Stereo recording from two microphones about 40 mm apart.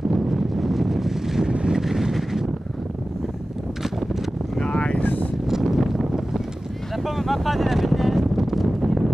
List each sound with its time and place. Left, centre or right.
0.1 s vehicle: centre
1.5 s vehicle: right
1.8 s vehicle: centre
4.6 s vehicle: left
5.0 s vehicle: left
5.5 s a sound: centre
8.5 s wind noise: centre